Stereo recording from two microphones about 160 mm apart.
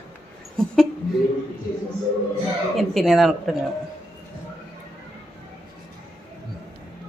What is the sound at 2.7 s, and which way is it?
Speech, centre (ahead or behind).